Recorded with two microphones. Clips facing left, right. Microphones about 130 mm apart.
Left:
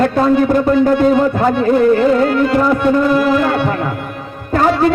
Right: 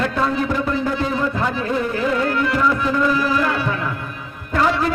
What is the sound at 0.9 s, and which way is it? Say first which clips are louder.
Speech: left 9 dB; 60° left (ahead or behind).